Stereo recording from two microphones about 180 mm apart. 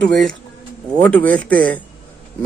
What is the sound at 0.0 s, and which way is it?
A man's voice, 5° left (ahead or behind).